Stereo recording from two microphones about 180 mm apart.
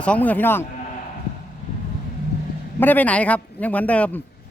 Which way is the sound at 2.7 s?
10° left (ahead or behind).